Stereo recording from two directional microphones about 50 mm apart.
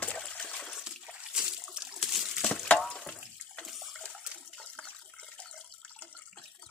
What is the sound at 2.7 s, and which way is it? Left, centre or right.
Water, centre.